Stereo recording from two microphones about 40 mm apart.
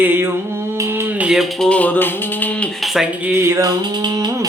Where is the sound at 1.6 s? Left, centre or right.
Left.